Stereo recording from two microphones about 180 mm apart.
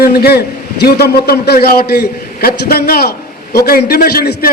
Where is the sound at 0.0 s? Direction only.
60° left (ahead or behind).